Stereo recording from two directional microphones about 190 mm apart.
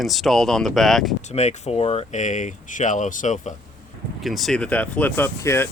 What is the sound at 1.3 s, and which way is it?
Speech, 35° left (ahead or behind).